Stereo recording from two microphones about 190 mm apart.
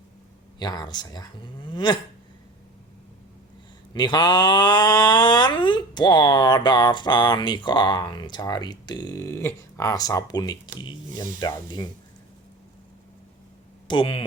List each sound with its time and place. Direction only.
0.6 s speech: 20° left (ahead or behind)
3.9 s speech: 20° left (ahead or behind)
13.8 s speech: 25° left (ahead or behind)